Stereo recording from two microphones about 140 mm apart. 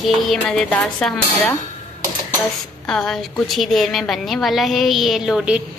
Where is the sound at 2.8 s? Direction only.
5° left (ahead or behind).